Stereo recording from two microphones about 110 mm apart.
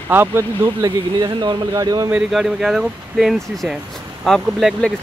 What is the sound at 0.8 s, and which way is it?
Speech, 40° right (ahead or behind).